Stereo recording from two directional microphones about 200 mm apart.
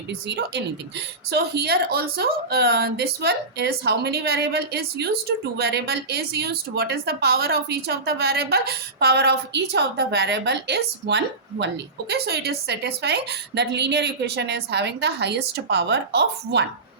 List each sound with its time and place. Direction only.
0.1 s a woman's voice: 55° right (ahead or behind)